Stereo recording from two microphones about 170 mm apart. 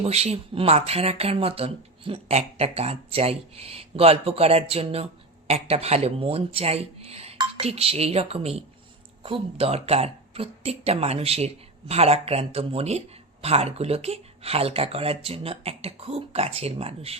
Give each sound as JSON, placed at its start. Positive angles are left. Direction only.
{"t": 0.0, "sound": "speech", "side_deg": -40}